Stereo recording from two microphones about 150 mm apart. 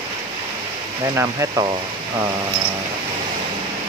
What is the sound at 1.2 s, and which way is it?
Speech, 20° right (ahead or behind).